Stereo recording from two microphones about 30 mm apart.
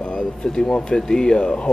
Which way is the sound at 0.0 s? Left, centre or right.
Left.